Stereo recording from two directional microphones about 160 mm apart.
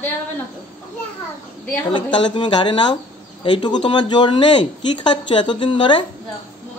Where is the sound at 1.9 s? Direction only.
30° left (ahead or behind).